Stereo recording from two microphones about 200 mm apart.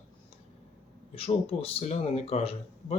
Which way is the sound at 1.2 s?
30° left (ahead or behind).